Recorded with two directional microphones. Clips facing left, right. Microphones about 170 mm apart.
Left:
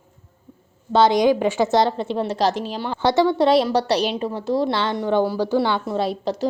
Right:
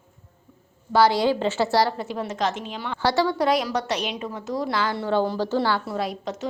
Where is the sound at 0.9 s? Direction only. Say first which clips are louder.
Left 3 dB; 20° left (ahead or behind).